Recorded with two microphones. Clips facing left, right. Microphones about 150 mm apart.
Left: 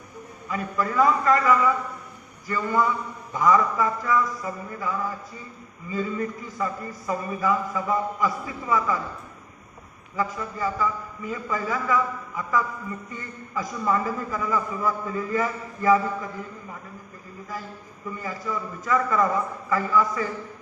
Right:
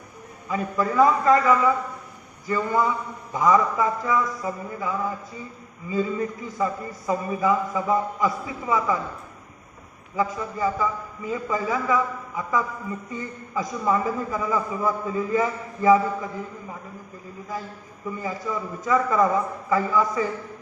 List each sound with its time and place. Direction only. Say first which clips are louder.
0.5 s a man's voice: right 3 dB; 25° right (ahead or behind)
10.2 s a man's voice: right 3 dB; 20° right (ahead or behind)
18.2 s a man's voice: right 2 dB; 20° right (ahead or behind)